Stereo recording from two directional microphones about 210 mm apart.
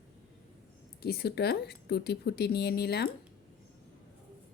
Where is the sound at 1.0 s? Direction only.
50° left (ahead or behind).